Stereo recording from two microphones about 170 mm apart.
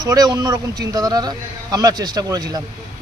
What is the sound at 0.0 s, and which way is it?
A man's voice, 20° right (ahead or behind).